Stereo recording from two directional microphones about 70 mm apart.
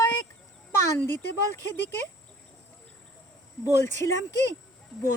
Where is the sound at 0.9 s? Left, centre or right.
Left.